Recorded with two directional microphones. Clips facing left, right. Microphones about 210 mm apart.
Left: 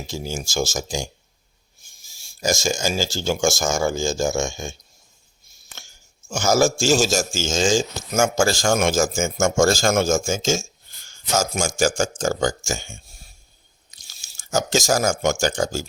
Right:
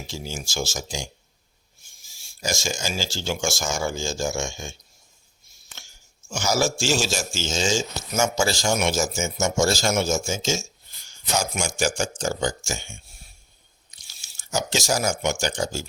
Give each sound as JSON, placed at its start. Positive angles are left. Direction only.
{"t": 0.1, "sound": "a man's voice", "side_deg": 45}
{"t": 2.1, "sound": "a man's voice", "side_deg": 45}
{"t": 6.2, "sound": "a man's voice", "side_deg": 45}
{"t": 14.1, "sound": "speech", "side_deg": 45}